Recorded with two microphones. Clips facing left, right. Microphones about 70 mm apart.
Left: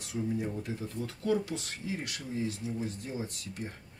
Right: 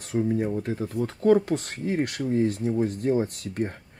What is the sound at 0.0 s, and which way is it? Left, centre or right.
Speech, right.